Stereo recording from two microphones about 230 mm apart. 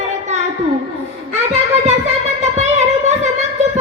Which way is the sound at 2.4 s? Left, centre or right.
Right.